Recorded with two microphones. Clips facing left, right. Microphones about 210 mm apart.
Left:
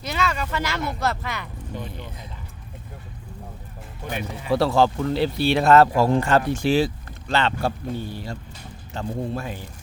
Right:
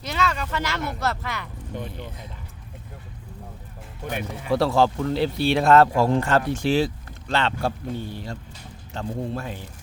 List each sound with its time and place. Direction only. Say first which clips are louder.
0.0 s speech: even; 10° left (ahead or behind)
1.7 s speech: right 1 dB; 55° right (ahead or behind)
4.4 s a man's voice: left 1 dB; centre (ahead or behind)